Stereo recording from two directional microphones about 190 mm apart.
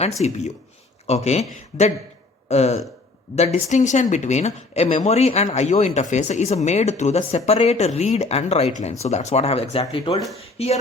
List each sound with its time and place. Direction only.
0.2 s speech: 35° left (ahead or behind)
2.5 s speech: 35° left (ahead or behind)